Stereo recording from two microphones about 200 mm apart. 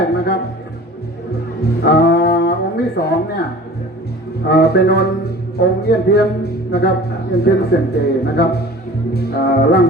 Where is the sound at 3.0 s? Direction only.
55° left (ahead or behind).